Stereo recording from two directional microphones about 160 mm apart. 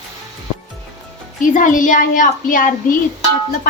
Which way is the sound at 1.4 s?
55° left (ahead or behind).